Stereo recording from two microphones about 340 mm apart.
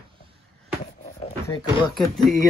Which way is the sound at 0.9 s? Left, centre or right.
Left.